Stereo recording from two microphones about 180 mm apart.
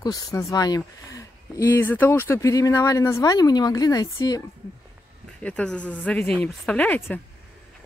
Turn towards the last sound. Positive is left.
turn(degrees=10)  # may be behind; listen again after turning